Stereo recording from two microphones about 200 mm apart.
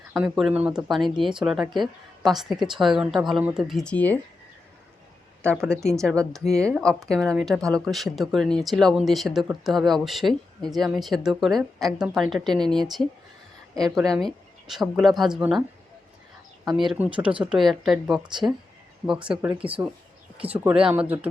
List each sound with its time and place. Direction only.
0.2 s speech: 5° right (ahead or behind)
5.6 s speech: 15° right (ahead or behind)
5.9 s speech: centre (ahead or behind)
16.7 s speech: 5° right (ahead or behind)
18.4 s speech: 15° right (ahead or behind)